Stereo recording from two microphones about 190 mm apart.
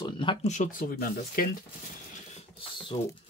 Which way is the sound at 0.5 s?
45° left (ahead or behind).